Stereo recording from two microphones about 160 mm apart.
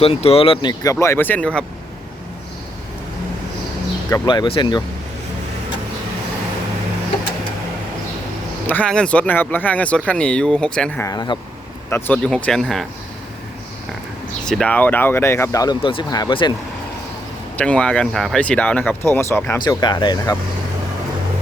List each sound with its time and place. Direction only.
0.0 s speech: 40° left (ahead or behind); by 1.6 s 5° left (ahead or behind)
4.1 s speech: 25° left (ahead or behind)
8.6 s speech: 10° left (ahead or behind)
11.0 s speech: 25° left (ahead or behind)
11.9 s speech: 15° left (ahead or behind)
14.4 s speech: 5° left (ahead or behind); by 16.5 s 30° left (ahead or behind)
17.6 s speech: 5° left (ahead or behind)
19.6 s speech: 30° left (ahead or behind)